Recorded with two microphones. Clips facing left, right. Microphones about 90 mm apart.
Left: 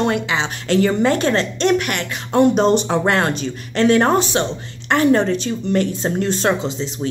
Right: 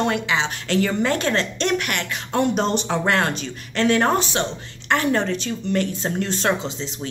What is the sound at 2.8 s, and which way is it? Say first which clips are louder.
Speech: left 3 dB; 30° left (ahead or behind).